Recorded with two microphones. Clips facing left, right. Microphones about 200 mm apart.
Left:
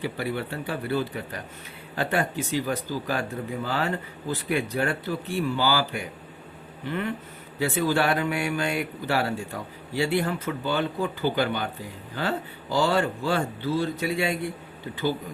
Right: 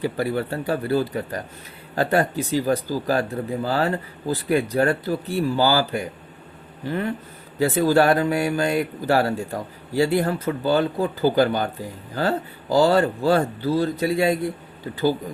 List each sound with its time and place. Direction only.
0.0 s speech: 40° right (ahead or behind)